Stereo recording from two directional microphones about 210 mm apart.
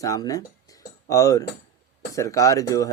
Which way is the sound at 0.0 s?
15° left (ahead or behind).